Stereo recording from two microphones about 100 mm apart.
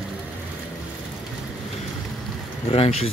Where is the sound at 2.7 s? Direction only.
80° left.